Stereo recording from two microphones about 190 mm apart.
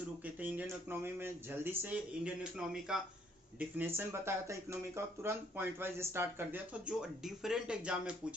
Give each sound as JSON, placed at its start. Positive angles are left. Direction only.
{"t": 0.3, "sound": "speech", "side_deg": -10}